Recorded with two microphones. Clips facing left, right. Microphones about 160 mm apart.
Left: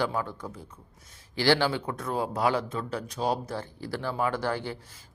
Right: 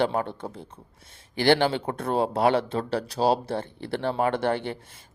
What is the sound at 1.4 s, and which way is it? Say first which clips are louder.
Speech: right 3 dB; 60° right (ahead or behind).